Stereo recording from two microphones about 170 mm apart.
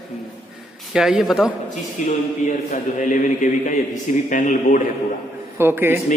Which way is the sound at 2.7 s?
45° left (ahead or behind).